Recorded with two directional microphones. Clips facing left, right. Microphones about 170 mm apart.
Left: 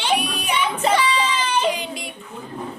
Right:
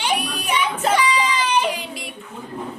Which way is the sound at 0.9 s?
10° right (ahead or behind).